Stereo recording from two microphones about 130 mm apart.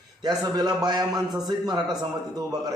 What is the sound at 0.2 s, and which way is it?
A man's voice, 30° right (ahead or behind).